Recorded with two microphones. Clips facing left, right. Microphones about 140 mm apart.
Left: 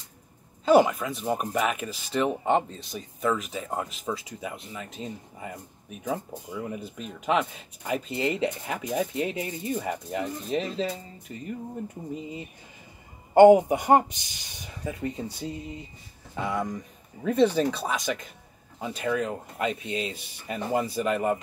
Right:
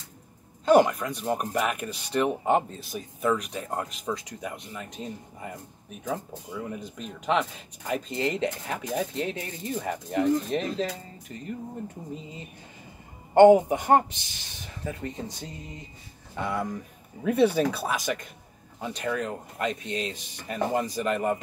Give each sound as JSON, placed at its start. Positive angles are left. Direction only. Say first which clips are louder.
{"t": 0.7, "sound": "speech", "louder": "even", "side_deg": 0}
{"t": 11.3, "sound": "speech", "louder": "left 1 dB", "side_deg": 15}
{"t": 13.3, "sound": "speech", "louder": "left 1 dB", "side_deg": 10}
{"t": 18.8, "sound": "speech", "louder": "left 2 dB", "side_deg": 10}